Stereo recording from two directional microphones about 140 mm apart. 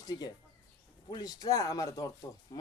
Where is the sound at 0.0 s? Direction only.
30° left (ahead or behind).